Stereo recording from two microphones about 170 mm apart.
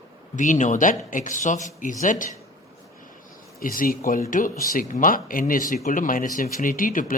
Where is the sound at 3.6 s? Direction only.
55° left (ahead or behind).